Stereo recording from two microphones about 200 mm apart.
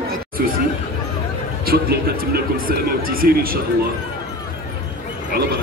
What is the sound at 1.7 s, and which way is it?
Speech, 50° right (ahead or behind).